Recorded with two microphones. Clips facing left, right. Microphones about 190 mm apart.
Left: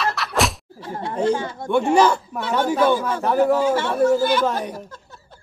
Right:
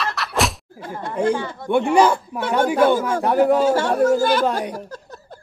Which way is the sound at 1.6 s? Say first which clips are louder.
Right 2 dB; 45° left (ahead or behind).